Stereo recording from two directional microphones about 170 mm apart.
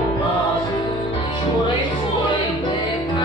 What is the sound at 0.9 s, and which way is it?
Music, 30° left (ahead or behind).